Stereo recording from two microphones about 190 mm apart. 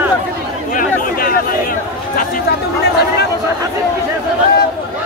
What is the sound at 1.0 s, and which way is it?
Chatter, 50° left (ahead or behind).